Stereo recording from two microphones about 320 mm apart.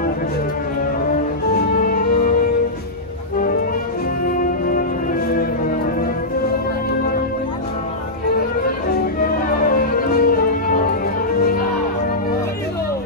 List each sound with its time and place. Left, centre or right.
1.9 s music: left
4.3 s music: left
9.2 s music: left